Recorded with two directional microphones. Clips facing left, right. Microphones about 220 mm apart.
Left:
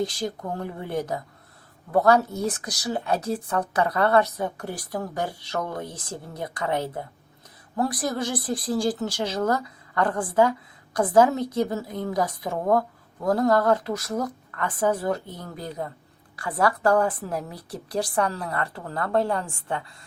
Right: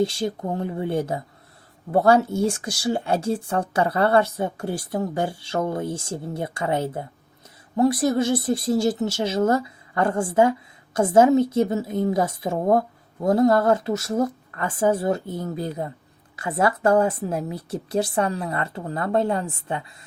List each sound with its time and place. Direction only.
0.0 s speech: 25° right (ahead or behind)